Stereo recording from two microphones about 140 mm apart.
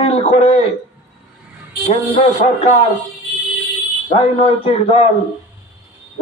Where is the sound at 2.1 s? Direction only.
60° left (ahead or behind).